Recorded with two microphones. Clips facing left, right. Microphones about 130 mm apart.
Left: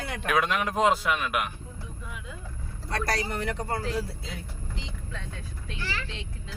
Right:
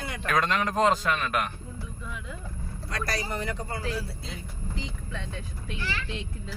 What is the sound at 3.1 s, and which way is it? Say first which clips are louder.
Speech: left 1 dB; 65° left (ahead or behind).